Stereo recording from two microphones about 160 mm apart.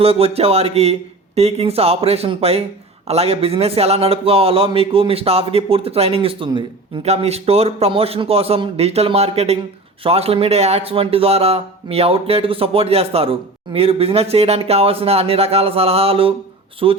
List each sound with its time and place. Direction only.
0.0 s a man's voice: 40° right (ahead or behind)